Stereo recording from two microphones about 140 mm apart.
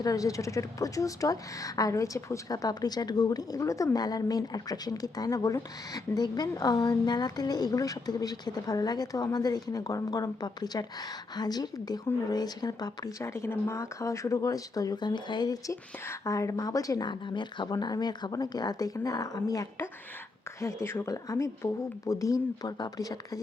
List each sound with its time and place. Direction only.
0.0 s speech: 25° left (ahead or behind)